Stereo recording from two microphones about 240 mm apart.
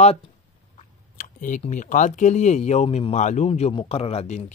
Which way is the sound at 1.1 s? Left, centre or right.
Left.